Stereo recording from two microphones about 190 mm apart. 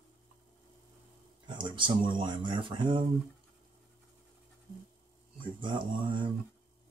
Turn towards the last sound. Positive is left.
turn(degrees=-25)  # may be behind; listen again after turning